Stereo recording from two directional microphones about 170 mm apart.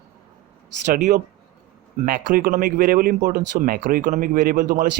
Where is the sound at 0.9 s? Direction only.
45° right (ahead or behind).